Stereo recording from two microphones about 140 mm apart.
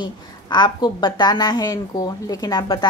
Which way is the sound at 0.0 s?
30° left (ahead or behind).